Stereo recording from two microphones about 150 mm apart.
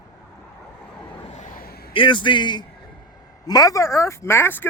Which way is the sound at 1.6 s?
90° left.